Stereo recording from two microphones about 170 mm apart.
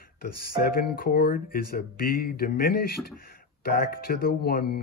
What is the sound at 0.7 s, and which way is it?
Speech, 60° left (ahead or behind).